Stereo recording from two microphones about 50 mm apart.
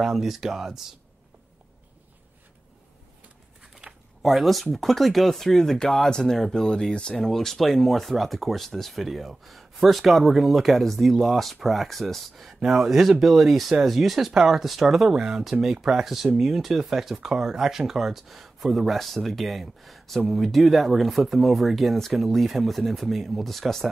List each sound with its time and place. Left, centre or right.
0.0 s speech: centre
3.8 s a sound: right
4.2 s speech: centre
7.2 s speech: centre
12.4 s speech: centre